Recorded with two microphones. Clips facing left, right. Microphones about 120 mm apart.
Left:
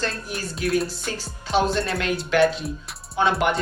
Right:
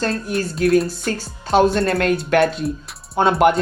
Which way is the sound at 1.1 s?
50° right (ahead or behind).